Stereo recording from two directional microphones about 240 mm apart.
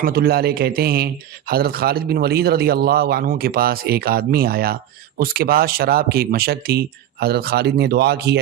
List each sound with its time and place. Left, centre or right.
0.0 s a man's voice: right